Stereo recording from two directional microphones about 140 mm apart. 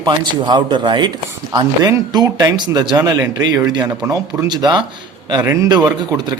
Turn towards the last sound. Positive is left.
turn(degrees=-20)  # may be behind; listen again after turning